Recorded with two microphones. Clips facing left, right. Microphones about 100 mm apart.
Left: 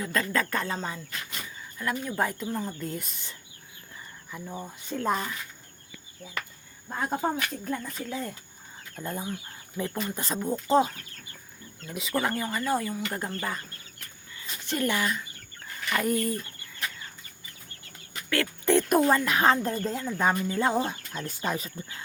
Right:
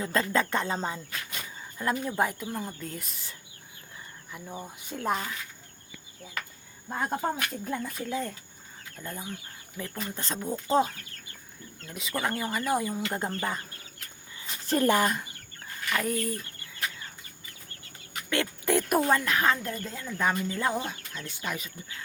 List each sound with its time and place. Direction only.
0.0 s speech: 25° right (ahead or behind)
2.1 s speech: 10° right (ahead or behind)
6.8 s speech: centre (ahead or behind)
9.0 s speech: 25° left (ahead or behind); by 12.5 s centre (ahead or behind)
12.5 s speech: 15° right (ahead or behind)
14.7 s speech: 40° right (ahead or behind)
15.9 s speech: 5° left (ahead or behind)
18.6 s speech: 5° right (ahead or behind)
19.0 s speech: 10° left (ahead or behind)
19.4 s speech: 30° left (ahead or behind)
20.1 s speech: 20° left (ahead or behind)
20.7 s speech: 30° left (ahead or behind)